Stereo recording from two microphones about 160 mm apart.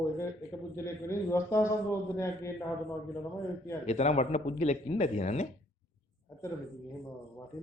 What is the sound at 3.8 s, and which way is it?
Speech, 45° left (ahead or behind).